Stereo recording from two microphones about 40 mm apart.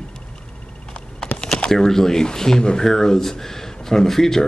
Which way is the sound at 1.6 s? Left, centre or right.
Centre.